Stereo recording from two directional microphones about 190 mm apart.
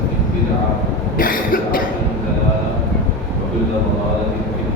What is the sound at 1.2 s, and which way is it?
Cough, 45° left (ahead or behind).